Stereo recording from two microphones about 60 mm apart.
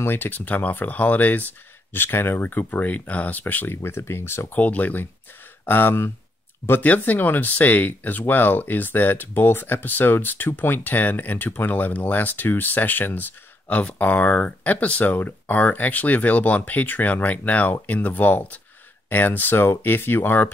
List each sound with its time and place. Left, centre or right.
0.0 s speech: left
3.7 s speech: left
4.6 s speech: left
6.8 s speech: left